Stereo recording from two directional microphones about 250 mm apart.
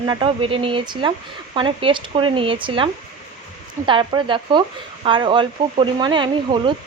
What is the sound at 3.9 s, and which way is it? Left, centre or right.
Speech, centre.